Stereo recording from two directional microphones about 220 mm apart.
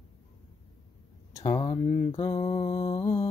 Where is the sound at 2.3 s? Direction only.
25° left (ahead or behind).